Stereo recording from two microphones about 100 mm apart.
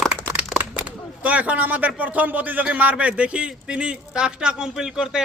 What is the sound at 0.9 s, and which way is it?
Speech, 15° right (ahead or behind).